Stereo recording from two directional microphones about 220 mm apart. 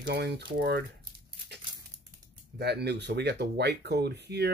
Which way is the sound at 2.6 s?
50° right (ahead or behind).